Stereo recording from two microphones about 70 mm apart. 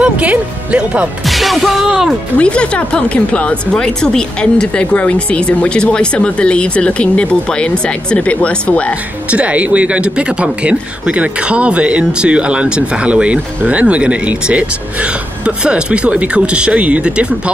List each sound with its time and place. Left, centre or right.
0.0 s speech: centre
1.2 s speech: centre
1.9 s speech: centre
2.3 s speech: centre
9.3 s speech: centre